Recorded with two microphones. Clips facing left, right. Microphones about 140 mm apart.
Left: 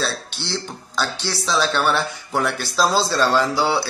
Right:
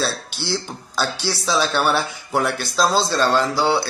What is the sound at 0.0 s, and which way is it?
Speech, 5° right (ahead or behind).